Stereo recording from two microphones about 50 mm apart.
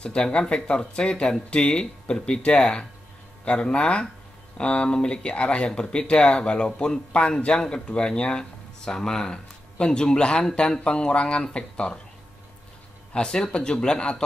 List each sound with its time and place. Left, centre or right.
0.0 s speech: left
13.1 s a man's voice: centre